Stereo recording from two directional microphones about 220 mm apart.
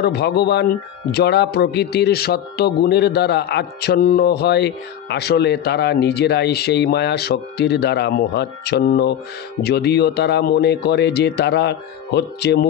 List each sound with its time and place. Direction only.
0.0 s speech: 45° left (ahead or behind)